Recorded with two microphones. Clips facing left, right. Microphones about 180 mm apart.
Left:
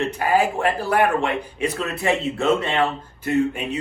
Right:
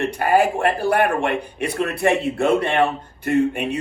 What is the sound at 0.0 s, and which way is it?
Speech, 60° right (ahead or behind).